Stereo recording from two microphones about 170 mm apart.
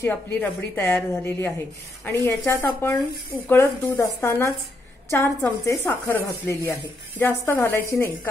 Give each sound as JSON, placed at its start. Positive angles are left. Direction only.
{"t": 0.0, "sound": "speech", "side_deg": 10}